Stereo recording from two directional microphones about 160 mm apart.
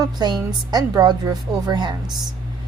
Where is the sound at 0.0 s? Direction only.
25° right (ahead or behind).